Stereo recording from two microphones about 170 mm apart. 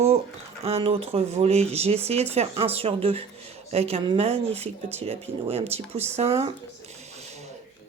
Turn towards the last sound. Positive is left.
turn(degrees=-40)  # may be behind; listen again after turning